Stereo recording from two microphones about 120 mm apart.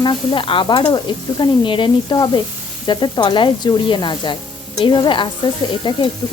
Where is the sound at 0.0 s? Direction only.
40° left (ahead or behind).